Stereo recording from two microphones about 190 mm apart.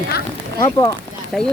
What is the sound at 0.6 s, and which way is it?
Speech, 20° left (ahead or behind).